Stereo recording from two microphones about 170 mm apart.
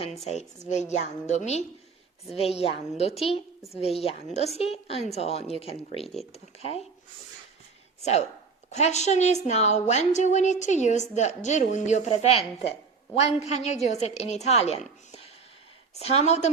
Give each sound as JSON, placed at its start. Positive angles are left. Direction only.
{"t": 0.0, "sound": "a woman's voice", "side_deg": 40}
{"t": 3.8, "sound": "a woman's voice", "side_deg": 35}
{"t": 8.0, "sound": "a woman's voice", "side_deg": 40}
{"t": 16.0, "sound": "a woman's voice", "side_deg": 40}